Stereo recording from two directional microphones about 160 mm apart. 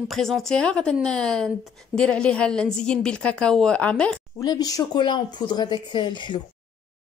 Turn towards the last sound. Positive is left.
turn(degrees=30)  # may be behind; listen again after turning